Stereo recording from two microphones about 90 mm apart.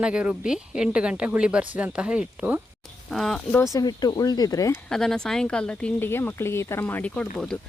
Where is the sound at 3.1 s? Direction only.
5° left (ahead or behind).